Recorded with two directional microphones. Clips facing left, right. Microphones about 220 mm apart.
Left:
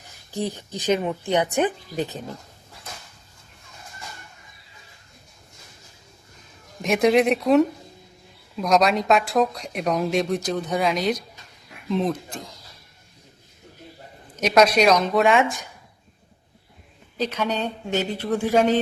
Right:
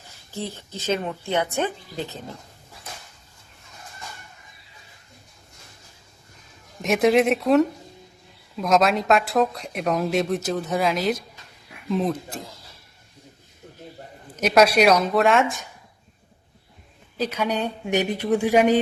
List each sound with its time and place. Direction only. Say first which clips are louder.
0.3 s a woman's voice: left 4 dB; 15° left (ahead or behind)
6.8 s a woman's voice: even; centre (ahead or behind)
14.3 s a woman's voice: even; 5° right (ahead or behind)
17.2 s speech: even; 10° right (ahead or behind)